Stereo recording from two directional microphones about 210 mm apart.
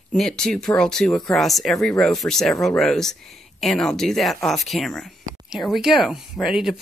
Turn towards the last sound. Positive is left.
turn(degrees=0)  # may be behind; listen again after turning